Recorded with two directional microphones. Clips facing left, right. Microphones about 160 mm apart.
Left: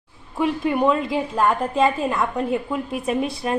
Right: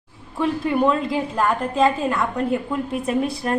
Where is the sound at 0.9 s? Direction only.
Centre (ahead or behind).